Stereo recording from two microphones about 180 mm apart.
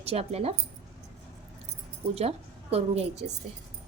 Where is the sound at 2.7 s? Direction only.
35° right (ahead or behind).